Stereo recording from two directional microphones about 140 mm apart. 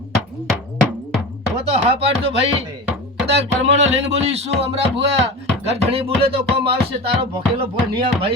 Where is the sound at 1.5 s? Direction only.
50° right (ahead or behind).